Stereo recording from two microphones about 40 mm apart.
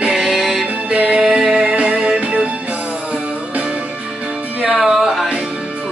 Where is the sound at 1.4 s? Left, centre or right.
Centre.